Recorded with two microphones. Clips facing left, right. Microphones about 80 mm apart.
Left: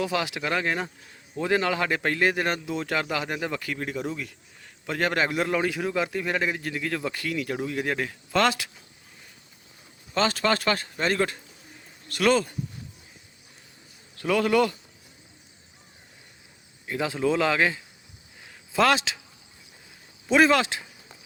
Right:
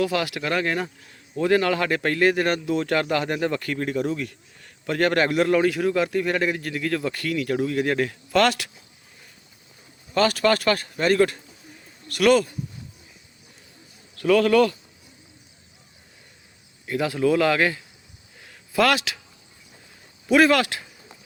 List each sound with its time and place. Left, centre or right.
0.0 s a man's voice: centre
8.3 s speech: left
10.2 s speech: left
14.2 s speech: centre
16.8 s speech: left
20.2 s speech: left